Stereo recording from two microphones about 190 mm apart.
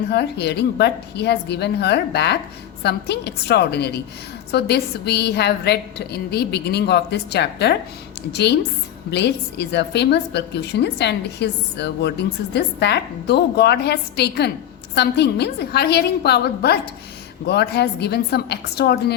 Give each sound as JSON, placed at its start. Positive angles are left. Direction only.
{"t": 0.1, "sound": "a woman's voice", "side_deg": 60}